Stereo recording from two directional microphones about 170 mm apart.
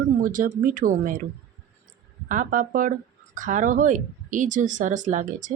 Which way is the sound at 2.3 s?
50° right (ahead or behind).